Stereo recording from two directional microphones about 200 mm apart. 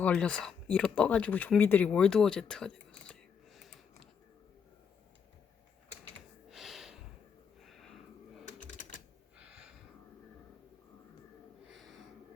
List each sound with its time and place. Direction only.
0.0 s speech: 5° left (ahead or behind)
6.5 s snort: centre (ahead or behind)
7.6 s sniff: centre (ahead or behind)
8.4 s typing: 40° left (ahead or behind)
9.4 s a sound: 5° right (ahead or behind)
11.7 s a sound: centre (ahead or behind)